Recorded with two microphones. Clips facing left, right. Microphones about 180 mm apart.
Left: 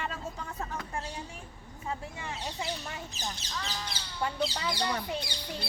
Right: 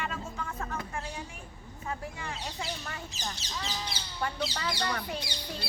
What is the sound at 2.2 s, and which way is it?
Speech, 25° left (ahead or behind).